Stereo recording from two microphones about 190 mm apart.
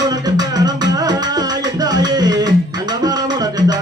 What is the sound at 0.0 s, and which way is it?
Music, 20° right (ahead or behind).